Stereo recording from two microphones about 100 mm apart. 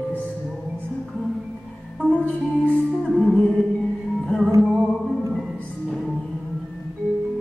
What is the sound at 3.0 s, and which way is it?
Music, centre (ahead or behind).